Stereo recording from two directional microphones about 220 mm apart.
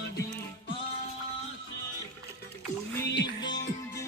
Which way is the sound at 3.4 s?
20° left (ahead or behind).